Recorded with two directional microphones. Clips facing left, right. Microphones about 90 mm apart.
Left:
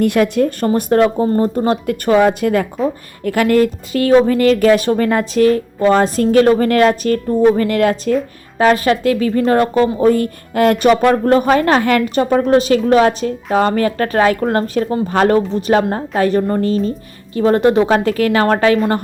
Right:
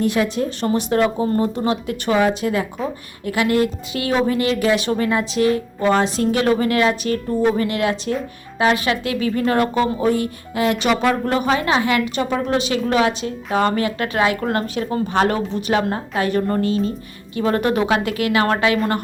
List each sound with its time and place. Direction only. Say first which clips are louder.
0.0 s speech: left 6 dB; 60° left (ahead or behind)
0.7 s speech: left 3 dB; 45° left (ahead or behind)